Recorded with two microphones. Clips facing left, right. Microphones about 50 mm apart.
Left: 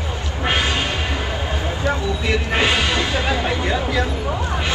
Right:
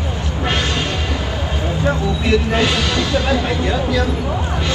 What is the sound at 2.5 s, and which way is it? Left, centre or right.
Speech, left.